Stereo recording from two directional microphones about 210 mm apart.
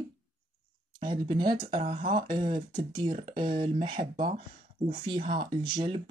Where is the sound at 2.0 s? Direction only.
25° right (ahead or behind).